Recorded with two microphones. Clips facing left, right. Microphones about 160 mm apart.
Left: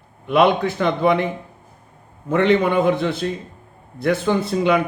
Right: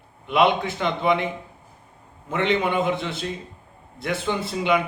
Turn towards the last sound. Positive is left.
turn(degrees=45)  # may be behind; listen again after turning